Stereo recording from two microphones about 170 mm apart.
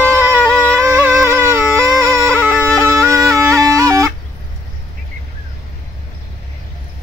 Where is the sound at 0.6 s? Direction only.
15° right (ahead or behind).